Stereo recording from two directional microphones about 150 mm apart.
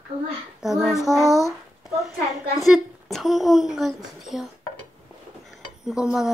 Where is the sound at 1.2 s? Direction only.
20° left (ahead or behind).